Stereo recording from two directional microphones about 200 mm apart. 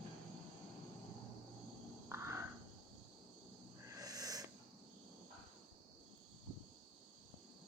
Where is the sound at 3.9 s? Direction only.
20° right (ahead or behind).